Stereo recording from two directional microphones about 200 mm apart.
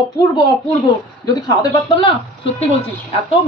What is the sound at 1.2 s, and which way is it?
Speech, 25° left (ahead or behind).